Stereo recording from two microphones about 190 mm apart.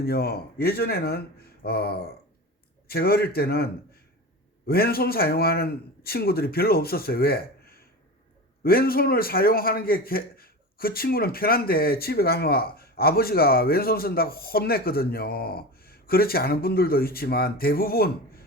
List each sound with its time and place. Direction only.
0.0 s a man's voice: 55° left (ahead or behind)